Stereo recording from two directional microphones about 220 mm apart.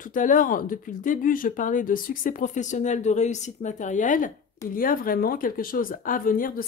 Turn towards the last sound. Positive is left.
turn(degrees=40)  # may be behind; listen again after turning